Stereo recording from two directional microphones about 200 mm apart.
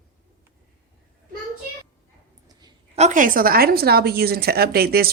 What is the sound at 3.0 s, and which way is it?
Speech, 40° right (ahead or behind).